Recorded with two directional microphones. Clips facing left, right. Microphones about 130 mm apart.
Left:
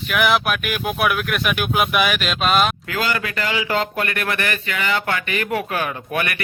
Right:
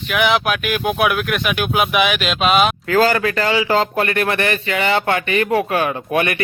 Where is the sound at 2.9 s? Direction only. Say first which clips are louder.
Right 8 dB; 40° right (ahead or behind).